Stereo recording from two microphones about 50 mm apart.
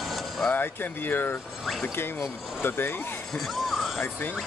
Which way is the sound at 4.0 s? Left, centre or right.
Left.